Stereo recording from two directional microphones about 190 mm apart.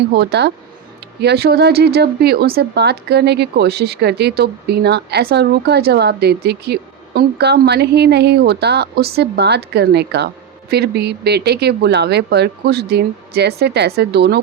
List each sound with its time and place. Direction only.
0.1 s a woman's voice: 60° right (ahead or behind)